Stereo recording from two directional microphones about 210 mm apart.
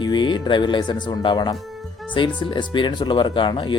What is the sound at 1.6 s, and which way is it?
Music, centre (ahead or behind).